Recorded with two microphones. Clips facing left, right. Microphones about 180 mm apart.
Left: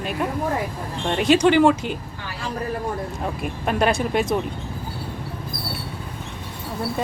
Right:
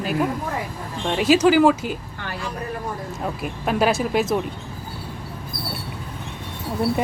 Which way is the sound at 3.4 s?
Centre (ahead or behind).